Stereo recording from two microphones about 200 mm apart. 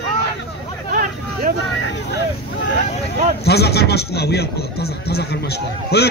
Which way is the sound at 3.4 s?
55° left (ahead or behind).